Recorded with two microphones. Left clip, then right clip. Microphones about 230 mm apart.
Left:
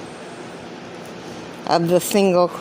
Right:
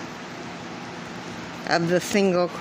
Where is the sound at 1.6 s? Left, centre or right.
Centre.